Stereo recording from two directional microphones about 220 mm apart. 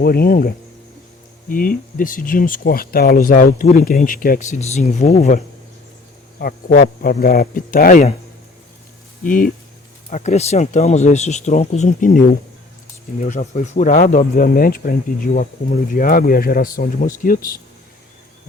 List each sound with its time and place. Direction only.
0.0 s speech: 45° left (ahead or behind)
6.4 s speech: 40° left (ahead or behind)
9.2 s speech: 40° left (ahead or behind)
13.2 s speech: 35° left (ahead or behind)